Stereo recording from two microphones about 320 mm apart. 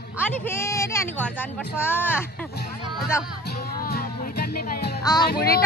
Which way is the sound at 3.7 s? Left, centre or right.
Left.